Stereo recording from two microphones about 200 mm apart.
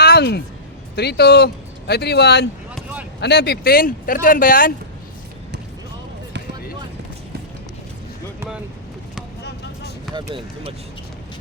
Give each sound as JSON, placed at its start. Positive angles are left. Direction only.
{"t": 0.0, "sound": "music", "side_deg": 55}
{"t": 0.9, "sound": "speech", "side_deg": 55}
{"t": 2.7, "sound": "a sound", "side_deg": -5}
{"t": 3.2, "sound": "speech", "side_deg": 55}
{"t": 9.4, "sound": "vehicle", "side_deg": 55}
{"t": 10.2, "sound": "speech", "side_deg": -25}